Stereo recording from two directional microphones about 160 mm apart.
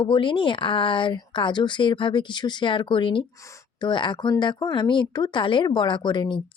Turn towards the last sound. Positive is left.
turn(degrees=30)  # may be behind; listen again after turning